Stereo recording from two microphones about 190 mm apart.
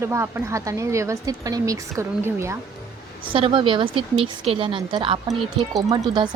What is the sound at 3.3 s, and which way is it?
A woman's voice, 25° right (ahead or behind).